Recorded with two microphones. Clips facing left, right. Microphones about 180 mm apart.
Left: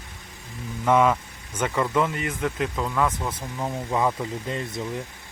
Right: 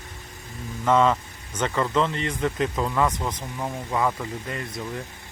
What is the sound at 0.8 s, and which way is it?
Speech, 10° left (ahead or behind).